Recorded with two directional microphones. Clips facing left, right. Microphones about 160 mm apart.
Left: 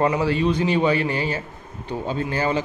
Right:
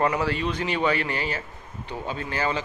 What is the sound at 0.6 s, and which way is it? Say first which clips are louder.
A man's voice: left 5 dB; 35° left (ahead or behind).